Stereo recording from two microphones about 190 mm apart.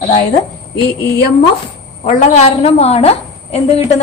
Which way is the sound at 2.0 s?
40° left (ahead or behind).